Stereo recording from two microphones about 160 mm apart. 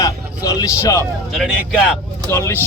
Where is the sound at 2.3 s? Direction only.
15° left (ahead or behind).